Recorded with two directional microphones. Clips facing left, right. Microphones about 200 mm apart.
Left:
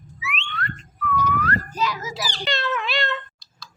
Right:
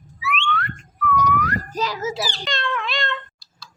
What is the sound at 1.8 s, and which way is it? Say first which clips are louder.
Children playing: right 6 dB; 30° right (ahead or behind).